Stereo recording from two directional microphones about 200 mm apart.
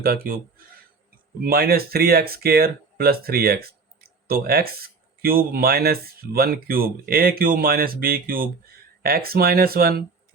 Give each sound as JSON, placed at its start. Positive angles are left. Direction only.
{"t": 0.0, "sound": "speech", "side_deg": -50}
{"t": 1.5, "sound": "speech", "side_deg": -50}